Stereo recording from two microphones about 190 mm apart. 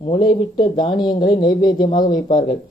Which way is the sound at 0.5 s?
25° left (ahead or behind).